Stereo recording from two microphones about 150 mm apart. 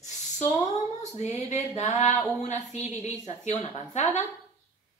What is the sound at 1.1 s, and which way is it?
Speech, 50° left (ahead or behind).